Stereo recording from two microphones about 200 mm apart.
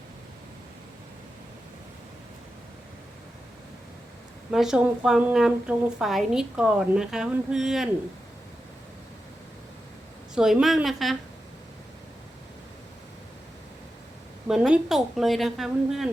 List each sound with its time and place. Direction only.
4.5 s a woman's voice: 5° right (ahead or behind)
10.3 s a woman's voice: centre (ahead or behind)
14.4 s a woman's voice: 5° right (ahead or behind)